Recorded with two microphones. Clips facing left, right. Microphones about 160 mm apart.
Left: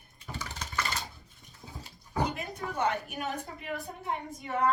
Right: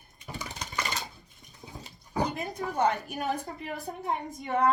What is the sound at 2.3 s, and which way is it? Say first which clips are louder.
A woman's voice: right 4 dB; 35° right (ahead or behind).